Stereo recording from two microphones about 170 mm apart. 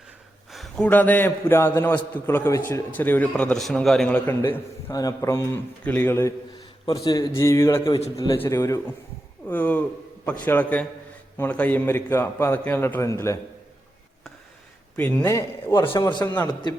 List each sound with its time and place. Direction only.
0.5 s a sound: centre (ahead or behind)
0.9 s a man's voice: 10° left (ahead or behind)
14.9 s a man's voice: 10° left (ahead or behind)
15.8 s a man's voice: 30° left (ahead or behind)
16.2 s a man's voice: 15° left (ahead or behind)